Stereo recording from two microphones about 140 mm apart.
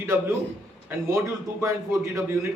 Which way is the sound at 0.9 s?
20° right (ahead or behind).